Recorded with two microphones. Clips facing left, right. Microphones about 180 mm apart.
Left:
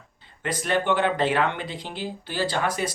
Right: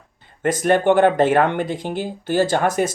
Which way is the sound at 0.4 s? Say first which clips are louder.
Right 8 dB; 50° right (ahead or behind).